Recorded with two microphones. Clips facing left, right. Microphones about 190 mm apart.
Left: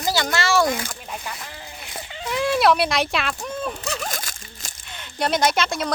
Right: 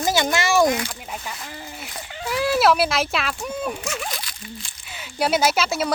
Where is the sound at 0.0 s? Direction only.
20° right (ahead or behind).